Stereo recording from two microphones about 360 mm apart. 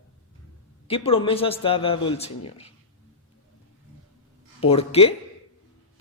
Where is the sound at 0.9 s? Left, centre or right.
Centre.